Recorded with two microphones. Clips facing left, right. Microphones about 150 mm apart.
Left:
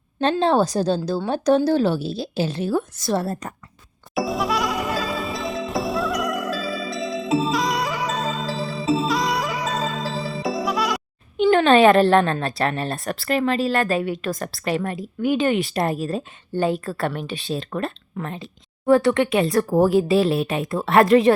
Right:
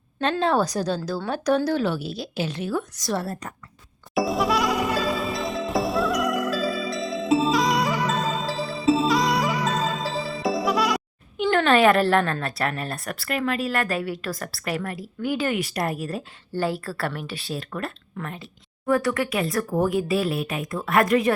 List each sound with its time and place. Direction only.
0.2 s a woman's voice: 30° left (ahead or behind)
4.1 s music: centre (ahead or behind)
11.4 s a woman's voice: 20° left (ahead or behind)